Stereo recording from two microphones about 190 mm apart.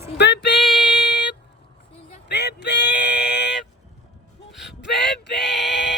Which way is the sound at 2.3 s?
65° left (ahead or behind).